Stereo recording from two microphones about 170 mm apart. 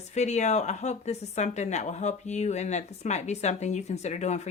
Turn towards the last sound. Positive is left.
turn(degrees=40)  # may be behind; listen again after turning